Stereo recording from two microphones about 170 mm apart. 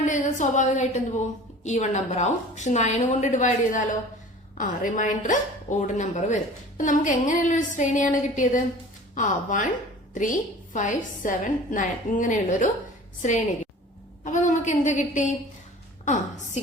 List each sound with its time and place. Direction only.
0.0 s a woman's voice: 45° left (ahead or behind)